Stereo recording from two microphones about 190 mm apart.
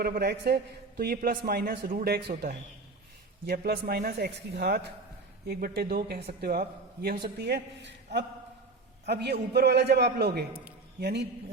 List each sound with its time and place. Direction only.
0.0 s a man's voice: 55° right (ahead or behind)